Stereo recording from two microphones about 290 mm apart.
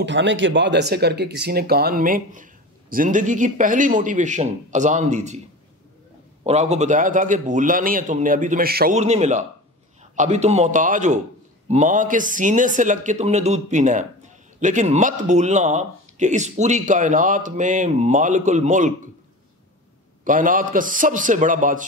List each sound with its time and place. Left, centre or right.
0.0 s speech: right
6.4 s speech: right
20.2 s speech: right